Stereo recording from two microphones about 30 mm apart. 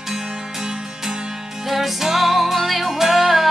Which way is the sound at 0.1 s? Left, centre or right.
Centre.